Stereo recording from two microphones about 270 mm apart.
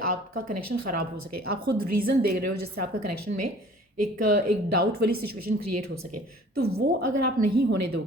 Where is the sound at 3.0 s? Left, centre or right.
Right.